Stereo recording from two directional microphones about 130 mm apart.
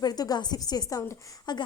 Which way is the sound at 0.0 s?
30° left (ahead or behind).